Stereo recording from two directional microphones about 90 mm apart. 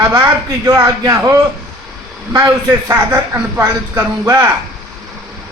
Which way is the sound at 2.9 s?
25° right (ahead or behind).